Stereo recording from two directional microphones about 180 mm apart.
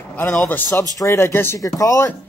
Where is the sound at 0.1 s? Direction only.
5° left (ahead or behind).